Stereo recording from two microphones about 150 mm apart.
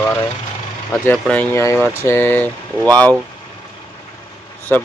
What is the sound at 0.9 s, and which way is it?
Speech, 10° left (ahead or behind).